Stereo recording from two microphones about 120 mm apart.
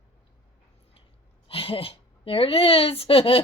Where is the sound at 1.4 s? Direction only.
50° left (ahead or behind).